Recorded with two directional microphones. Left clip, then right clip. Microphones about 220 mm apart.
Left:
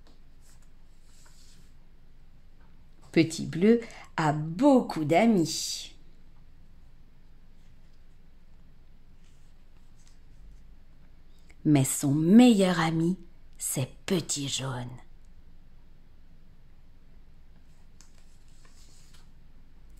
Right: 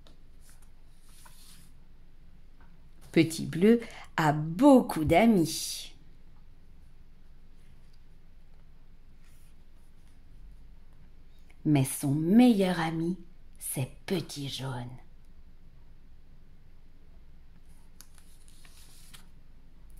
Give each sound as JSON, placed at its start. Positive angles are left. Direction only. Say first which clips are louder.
{"t": 3.1, "sound": "a woman's voice", "louder": "left 1 dB", "side_deg": 0}
{"t": 11.4, "sound": "a woman's voice", "louder": "left 3 dB", "side_deg": 15}